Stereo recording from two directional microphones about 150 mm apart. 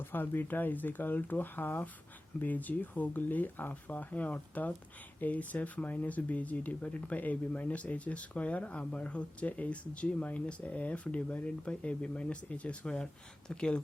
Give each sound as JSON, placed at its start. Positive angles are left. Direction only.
{"t": 0.0, "sound": "speech", "side_deg": 15}